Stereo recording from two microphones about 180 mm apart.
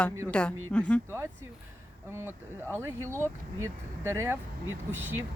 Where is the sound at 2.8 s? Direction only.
15° right (ahead or behind).